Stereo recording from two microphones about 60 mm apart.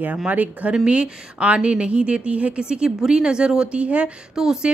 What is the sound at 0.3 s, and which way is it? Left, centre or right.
Speech, right.